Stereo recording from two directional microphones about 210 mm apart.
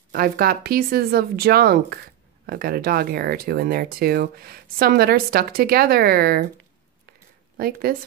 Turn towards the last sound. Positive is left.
turn(degrees=-45)  # may be behind; listen again after turning